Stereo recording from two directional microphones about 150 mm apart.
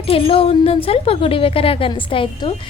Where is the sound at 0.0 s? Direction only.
40° left (ahead or behind).